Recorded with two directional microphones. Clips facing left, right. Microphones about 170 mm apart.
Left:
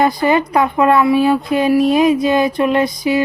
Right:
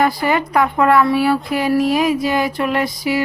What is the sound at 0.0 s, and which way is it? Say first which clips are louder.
Speech: left 3 dB; 20° left (ahead or behind).